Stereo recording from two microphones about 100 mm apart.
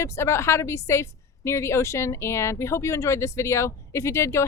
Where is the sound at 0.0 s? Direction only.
25° left (ahead or behind).